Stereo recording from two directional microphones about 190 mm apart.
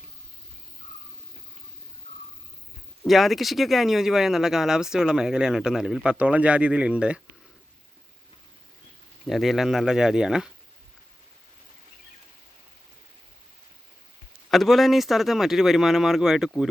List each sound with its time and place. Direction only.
3.0 s speech: centre (ahead or behind)
9.2 s speech: centre (ahead or behind)
14.5 s speech: centre (ahead or behind)